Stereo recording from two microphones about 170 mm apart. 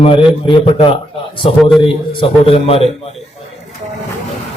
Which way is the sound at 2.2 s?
35° left (ahead or behind).